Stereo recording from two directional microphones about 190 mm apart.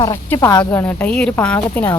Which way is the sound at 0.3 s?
15° left (ahead or behind).